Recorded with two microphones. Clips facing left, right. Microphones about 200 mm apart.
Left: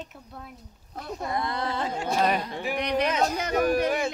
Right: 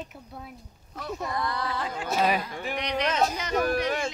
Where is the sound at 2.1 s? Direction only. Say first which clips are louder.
Even; 5° right (ahead or behind).